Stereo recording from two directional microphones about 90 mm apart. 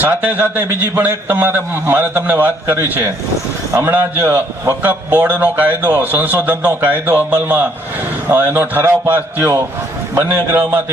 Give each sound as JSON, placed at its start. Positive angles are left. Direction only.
{"t": 0.0, "sound": "a man's voice", "side_deg": -15}